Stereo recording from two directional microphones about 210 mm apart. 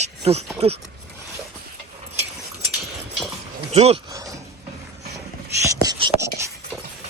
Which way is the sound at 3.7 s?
30° right (ahead or behind).